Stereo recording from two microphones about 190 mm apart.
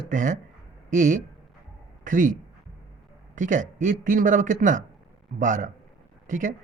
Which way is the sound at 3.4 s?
45° right (ahead or behind).